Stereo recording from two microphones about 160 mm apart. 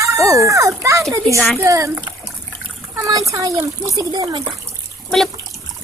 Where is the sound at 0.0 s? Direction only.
20° right (ahead or behind).